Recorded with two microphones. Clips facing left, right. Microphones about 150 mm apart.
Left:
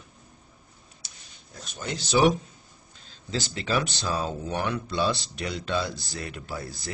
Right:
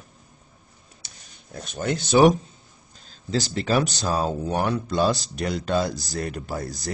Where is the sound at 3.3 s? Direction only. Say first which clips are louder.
Right 5 dB; 40° right (ahead or behind).